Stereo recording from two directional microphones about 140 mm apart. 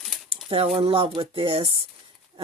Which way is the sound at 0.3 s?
40° right (ahead or behind).